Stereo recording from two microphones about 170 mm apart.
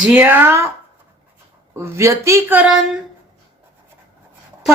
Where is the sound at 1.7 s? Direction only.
15° right (ahead or behind).